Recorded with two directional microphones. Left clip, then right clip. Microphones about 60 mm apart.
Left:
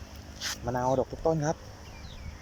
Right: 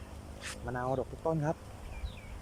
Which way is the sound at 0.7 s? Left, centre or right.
Left.